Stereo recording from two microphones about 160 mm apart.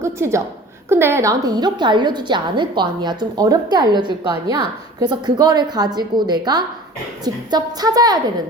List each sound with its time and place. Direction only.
0.0 s a woman's voice: 15° right (ahead or behind)